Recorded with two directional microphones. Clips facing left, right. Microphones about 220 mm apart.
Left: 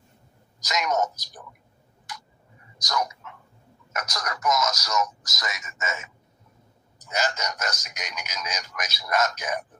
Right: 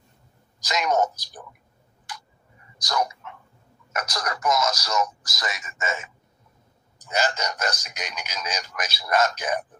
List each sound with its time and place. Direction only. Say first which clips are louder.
0.6 s speech: right 3 dB; 30° right (ahead or behind)
2.1 s tick-tock: right 1 dB; 30° right (ahead or behind)
2.8 s speech: right 2 dB; 30° right (ahead or behind)